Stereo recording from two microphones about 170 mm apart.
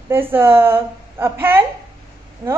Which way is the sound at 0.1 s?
15° right (ahead or behind).